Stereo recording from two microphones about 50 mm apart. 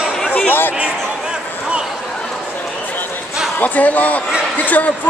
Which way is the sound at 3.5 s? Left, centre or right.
Left.